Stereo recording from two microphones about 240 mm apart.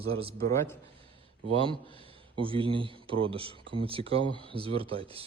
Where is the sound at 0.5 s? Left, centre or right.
Centre.